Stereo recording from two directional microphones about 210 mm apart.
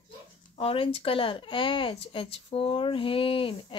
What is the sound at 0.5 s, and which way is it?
Speech, 25° left (ahead or behind).